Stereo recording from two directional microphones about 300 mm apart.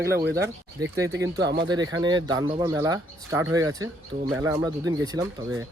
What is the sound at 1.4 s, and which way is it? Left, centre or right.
Speech, right.